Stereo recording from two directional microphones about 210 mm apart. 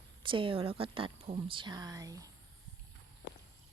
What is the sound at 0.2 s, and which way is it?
Speech, 25° right (ahead or behind).